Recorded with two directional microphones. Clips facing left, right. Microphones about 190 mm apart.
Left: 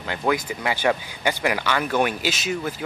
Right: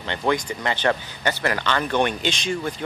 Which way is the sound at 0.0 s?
5° left (ahead or behind).